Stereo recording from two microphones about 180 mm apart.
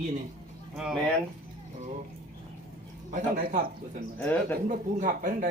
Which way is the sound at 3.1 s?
50° right (ahead or behind).